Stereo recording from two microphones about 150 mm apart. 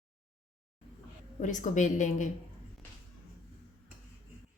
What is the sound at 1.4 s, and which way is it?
Speech, 55° left (ahead or behind).